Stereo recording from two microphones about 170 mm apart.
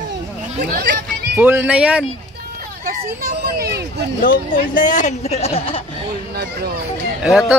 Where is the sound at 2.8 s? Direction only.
60° right (ahead or behind).